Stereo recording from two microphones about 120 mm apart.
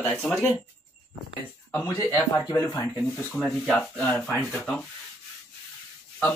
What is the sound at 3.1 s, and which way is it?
Speech, 5° left (ahead or behind).